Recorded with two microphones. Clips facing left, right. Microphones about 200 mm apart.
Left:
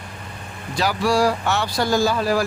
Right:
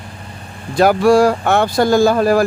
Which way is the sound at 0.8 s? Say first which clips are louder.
Right 9 dB; 55° right (ahead or behind).